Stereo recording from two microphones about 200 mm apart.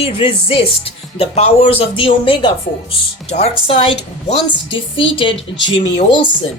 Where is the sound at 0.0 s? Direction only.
25° left (ahead or behind).